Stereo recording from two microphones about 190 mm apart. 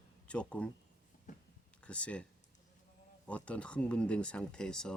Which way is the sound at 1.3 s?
40° left (ahead or behind).